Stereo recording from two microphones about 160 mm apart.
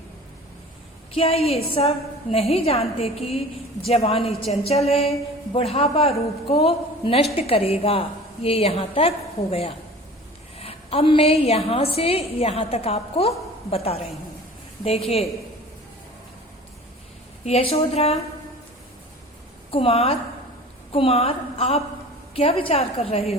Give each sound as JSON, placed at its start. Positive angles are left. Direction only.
{"t": 1.1, "sound": "a woman's voice", "side_deg": 40}
{"t": 17.4, "sound": "a woman's voice", "side_deg": 40}
{"t": 19.7, "sound": "a woman's voice", "side_deg": 35}